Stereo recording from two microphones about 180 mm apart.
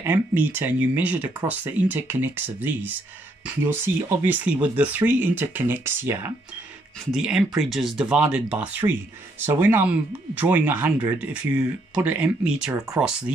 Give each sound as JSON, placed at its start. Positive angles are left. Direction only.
{"t": 0.0, "sound": "speech", "side_deg": -10}